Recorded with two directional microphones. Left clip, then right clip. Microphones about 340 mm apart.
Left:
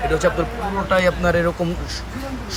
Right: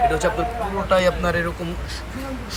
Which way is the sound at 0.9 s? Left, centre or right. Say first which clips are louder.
Left 1 dB; centre.